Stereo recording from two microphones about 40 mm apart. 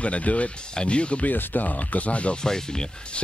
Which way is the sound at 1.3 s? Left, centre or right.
Left.